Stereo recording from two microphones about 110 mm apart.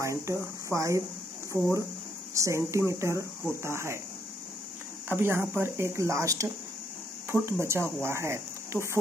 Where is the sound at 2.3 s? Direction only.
25° right (ahead or behind).